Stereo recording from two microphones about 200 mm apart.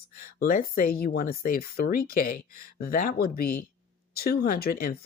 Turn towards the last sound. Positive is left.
turn(degrees=50)  # may be behind; listen again after turning